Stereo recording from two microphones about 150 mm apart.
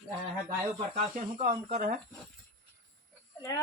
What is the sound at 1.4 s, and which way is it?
Speech, 75° right (ahead or behind).